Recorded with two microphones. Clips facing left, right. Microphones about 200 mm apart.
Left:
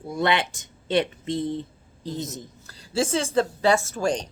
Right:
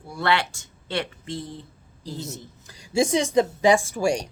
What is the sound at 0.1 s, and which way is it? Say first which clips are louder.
Speech: left 1 dB; 20° left (ahead or behind).